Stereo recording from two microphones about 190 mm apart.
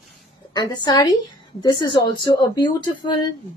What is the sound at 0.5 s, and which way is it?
Speech, 25° left (ahead or behind).